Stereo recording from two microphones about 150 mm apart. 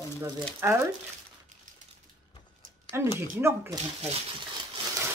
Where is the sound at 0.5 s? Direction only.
15° right (ahead or behind).